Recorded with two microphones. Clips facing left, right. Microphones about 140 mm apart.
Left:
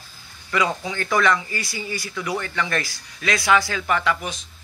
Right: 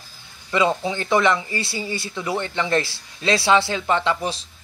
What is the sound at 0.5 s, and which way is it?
Speech, 25° right (ahead or behind).